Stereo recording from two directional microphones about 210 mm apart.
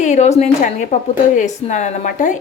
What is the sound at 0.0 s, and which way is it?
Speech, 35° left (ahead or behind).